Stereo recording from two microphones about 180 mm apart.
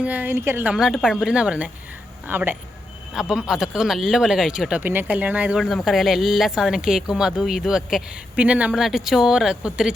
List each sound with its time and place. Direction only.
0.0 s a woman's voice: 10° right (ahead or behind)